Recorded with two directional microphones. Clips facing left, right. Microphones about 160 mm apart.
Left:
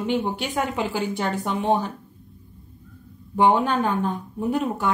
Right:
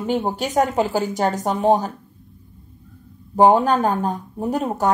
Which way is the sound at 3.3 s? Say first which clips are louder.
Right 5 dB; 40° right (ahead or behind).